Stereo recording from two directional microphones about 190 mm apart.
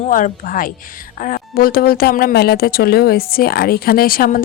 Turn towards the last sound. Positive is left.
turn(degrees=50)  # may be behind; listen again after turning